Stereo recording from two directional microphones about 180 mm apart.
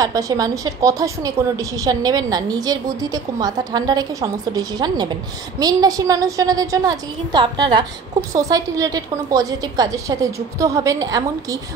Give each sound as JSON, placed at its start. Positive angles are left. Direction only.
{"t": 0.0, "sound": "a woman's voice", "side_deg": -20}